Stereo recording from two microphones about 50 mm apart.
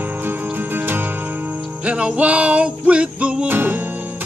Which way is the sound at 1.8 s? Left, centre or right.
Right.